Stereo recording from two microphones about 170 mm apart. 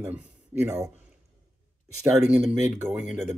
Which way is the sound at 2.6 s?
15° right (ahead or behind).